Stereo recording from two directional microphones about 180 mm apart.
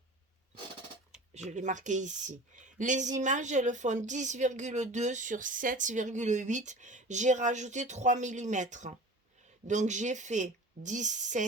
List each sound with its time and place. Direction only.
1.3 s speech: 40° right (ahead or behind)